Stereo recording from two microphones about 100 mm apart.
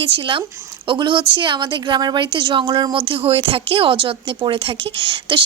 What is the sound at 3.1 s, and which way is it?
A woman's voice, 70° right (ahead or behind).